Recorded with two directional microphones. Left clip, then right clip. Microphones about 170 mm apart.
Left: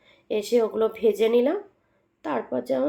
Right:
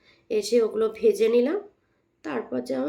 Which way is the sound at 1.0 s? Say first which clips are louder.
Even; 15° left (ahead or behind).